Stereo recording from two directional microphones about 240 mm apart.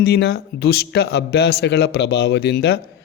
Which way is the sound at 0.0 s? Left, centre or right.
Left.